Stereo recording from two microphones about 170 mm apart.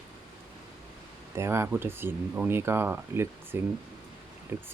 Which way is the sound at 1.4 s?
15° right (ahead or behind).